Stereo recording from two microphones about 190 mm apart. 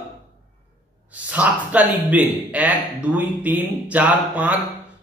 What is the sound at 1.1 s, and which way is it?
Speech, 5° right (ahead or behind).